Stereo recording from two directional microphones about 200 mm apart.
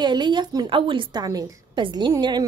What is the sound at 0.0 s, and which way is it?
A woman's voice, 20° right (ahead or behind).